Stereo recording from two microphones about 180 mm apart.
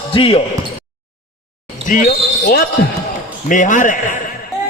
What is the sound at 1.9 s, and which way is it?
A man's voice, 55° left (ahead or behind).